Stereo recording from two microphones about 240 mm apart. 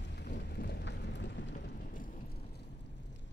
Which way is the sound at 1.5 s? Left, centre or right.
Left.